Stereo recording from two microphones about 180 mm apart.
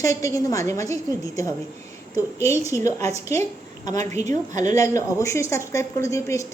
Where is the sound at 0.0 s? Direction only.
20° left (ahead or behind).